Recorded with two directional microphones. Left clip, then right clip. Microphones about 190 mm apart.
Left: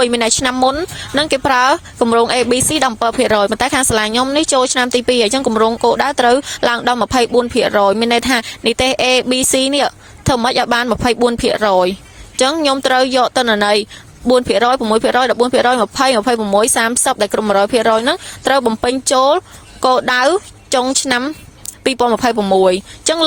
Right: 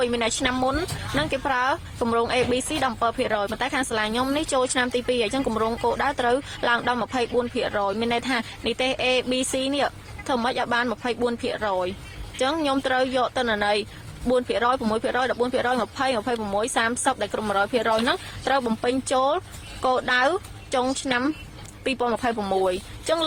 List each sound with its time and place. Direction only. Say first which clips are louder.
0.0 s speech: left 9 dB; 50° left (ahead or behind)
1.2 s speech: left 11 dB; 50° left (ahead or behind)
14.8 s speech: left 11 dB; 40° left (ahead or behind)
15.0 s speech: left 11 dB; 50° left (ahead or behind)